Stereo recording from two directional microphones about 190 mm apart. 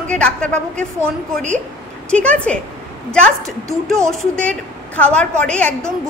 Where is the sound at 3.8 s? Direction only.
Centre (ahead or behind).